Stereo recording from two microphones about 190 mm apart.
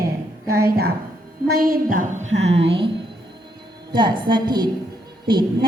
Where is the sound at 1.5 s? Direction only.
50° right (ahead or behind).